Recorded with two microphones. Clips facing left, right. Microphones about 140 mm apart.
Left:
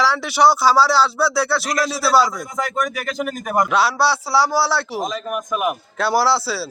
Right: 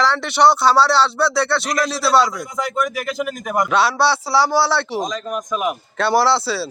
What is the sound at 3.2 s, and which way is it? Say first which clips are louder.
Speech: left 2 dB; 45° left (ahead or behind).